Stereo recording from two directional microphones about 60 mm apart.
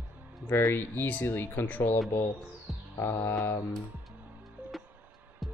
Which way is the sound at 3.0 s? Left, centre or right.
Left.